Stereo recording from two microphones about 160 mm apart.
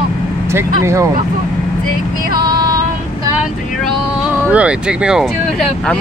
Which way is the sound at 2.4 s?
25° right (ahead or behind).